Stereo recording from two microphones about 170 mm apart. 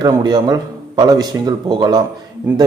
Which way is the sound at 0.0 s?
25° right (ahead or behind).